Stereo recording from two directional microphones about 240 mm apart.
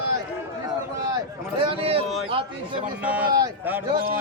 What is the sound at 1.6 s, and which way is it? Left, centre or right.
Speech, right.